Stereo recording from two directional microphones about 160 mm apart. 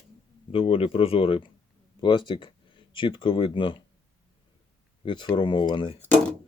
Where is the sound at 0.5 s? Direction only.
35° left (ahead or behind).